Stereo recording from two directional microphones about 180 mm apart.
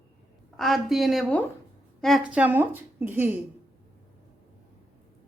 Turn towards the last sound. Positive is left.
turn(degrees=-10)  # may be behind; listen again after turning